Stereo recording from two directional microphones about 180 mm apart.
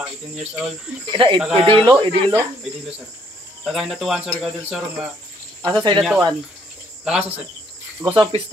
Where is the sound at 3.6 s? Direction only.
Centre (ahead or behind).